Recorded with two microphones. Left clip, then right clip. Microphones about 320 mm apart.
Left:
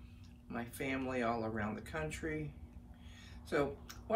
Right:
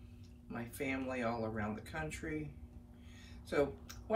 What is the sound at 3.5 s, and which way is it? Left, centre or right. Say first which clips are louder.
Speech: right 1 dB; centre.